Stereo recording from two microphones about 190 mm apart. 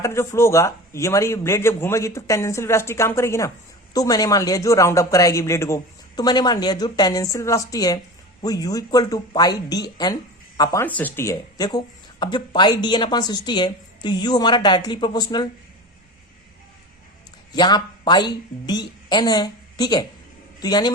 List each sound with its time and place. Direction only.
0.0 s a woman's voice: 15° left (ahead or behind)
17.5 s a woman's voice: 20° left (ahead or behind)